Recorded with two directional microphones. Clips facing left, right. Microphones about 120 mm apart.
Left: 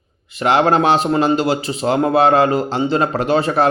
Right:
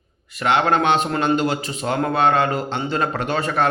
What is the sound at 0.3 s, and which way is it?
A man's voice, 35° left (ahead or behind).